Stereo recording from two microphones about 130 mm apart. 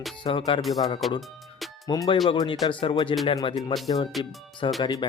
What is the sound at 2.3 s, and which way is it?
Speech, 40° left (ahead or behind).